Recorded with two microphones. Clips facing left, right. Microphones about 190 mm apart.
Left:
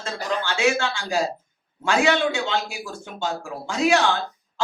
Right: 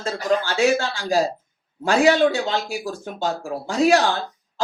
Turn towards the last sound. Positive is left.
turn(degrees=-35)  # may be behind; listen again after turning